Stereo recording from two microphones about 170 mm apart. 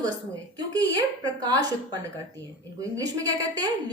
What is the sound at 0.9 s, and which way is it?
Speech, 25° right (ahead or behind).